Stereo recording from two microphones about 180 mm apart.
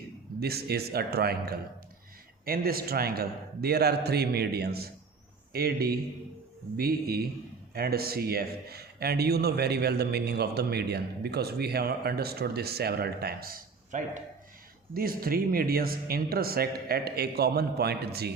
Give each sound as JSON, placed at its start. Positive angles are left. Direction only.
{"t": 0.3, "sound": "speech", "side_deg": -60}